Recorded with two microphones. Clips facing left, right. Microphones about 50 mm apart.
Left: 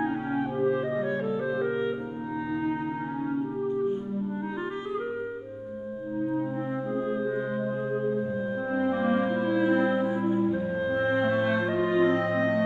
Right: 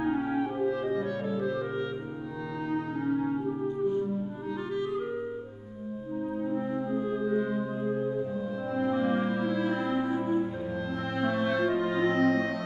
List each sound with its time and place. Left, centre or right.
0.4 s clarinet: left
2.6 s music: left
6.9 s music: centre